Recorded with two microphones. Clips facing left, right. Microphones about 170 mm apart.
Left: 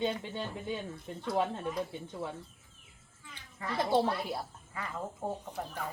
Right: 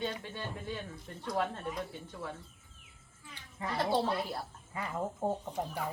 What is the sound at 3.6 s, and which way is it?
Speech, 20° right (ahead or behind).